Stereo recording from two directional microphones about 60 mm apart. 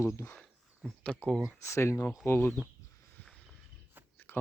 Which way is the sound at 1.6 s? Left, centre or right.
Left.